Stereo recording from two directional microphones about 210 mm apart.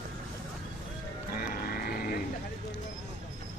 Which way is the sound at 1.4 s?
45° left (ahead or behind).